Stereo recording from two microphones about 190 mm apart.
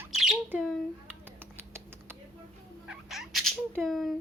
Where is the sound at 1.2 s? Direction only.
10° right (ahead or behind).